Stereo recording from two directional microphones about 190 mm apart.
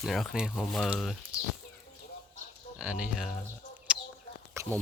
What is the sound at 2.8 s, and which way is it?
Speech, 5° right (ahead or behind).